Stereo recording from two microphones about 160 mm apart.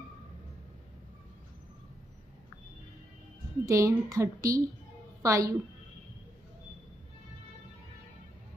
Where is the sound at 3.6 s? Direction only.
20° right (ahead or behind).